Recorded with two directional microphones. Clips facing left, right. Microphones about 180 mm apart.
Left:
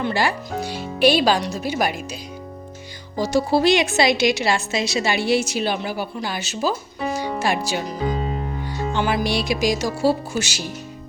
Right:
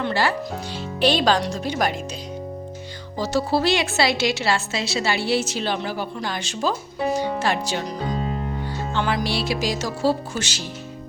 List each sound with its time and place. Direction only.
0.0 s a woman's voice: 15° left (ahead or behind)
3.2 s a woman's voice: 15° left (ahead or behind)